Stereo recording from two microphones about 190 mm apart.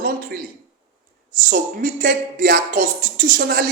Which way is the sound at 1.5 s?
50° right (ahead or behind).